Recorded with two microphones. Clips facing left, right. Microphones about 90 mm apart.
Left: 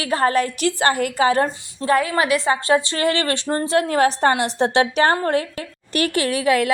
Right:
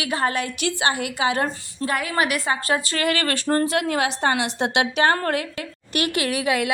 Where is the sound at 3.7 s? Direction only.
40° left (ahead or behind).